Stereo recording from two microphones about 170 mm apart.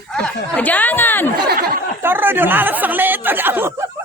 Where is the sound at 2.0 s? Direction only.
10° right (ahead or behind).